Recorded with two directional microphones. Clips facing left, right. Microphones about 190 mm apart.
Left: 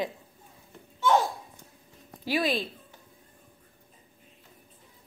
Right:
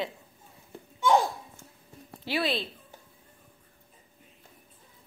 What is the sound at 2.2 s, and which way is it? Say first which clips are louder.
Speech: left 2 dB; 15° left (ahead or behind).